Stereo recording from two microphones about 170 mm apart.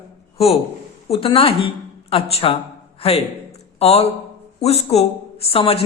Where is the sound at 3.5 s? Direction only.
40° left (ahead or behind).